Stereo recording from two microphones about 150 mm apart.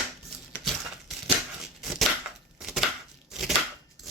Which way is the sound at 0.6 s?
Centre (ahead or behind).